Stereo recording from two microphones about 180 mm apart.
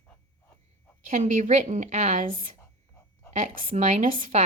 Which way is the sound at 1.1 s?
45° right (ahead or behind).